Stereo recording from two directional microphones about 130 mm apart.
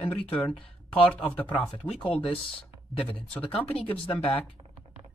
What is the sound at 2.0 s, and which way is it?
Speech, 45° left (ahead or behind).